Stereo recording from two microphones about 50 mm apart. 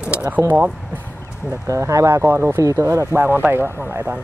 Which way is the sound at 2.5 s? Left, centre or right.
Right.